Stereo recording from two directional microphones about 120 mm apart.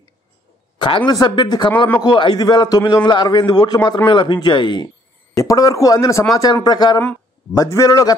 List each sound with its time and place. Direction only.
0.7 s a man's voice: 40° left (ahead or behind)
5.3 s a man's voice: 30° left (ahead or behind)